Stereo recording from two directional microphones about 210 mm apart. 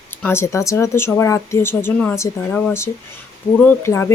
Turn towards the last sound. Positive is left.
turn(degrees=10)  # may be behind; listen again after turning